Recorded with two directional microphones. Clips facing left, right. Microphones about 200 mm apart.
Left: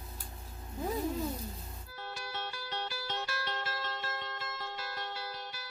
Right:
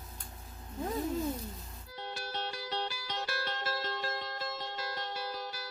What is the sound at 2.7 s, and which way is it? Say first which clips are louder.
Music: left 1 dB; 15° right (ahead or behind).